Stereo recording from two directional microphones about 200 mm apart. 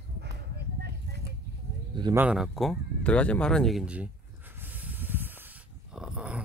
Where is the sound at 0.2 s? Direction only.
55° right (ahead or behind).